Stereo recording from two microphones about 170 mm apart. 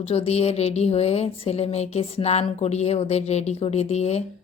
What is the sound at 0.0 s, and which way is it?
Speech, 35° left (ahead or behind).